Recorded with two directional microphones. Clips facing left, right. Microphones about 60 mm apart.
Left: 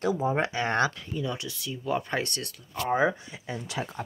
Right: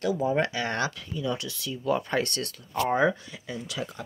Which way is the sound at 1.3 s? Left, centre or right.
Centre.